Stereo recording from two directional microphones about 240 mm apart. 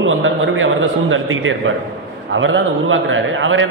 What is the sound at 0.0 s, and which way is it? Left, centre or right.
A man's voice, right.